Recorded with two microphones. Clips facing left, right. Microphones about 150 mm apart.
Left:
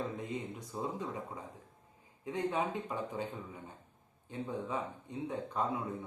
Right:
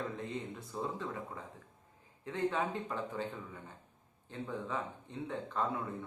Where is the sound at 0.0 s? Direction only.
15° left (ahead or behind).